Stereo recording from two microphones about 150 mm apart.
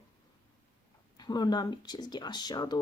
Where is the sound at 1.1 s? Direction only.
30° left (ahead or behind).